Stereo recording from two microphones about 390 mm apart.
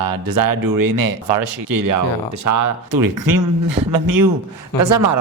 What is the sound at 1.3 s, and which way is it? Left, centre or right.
Speech, right.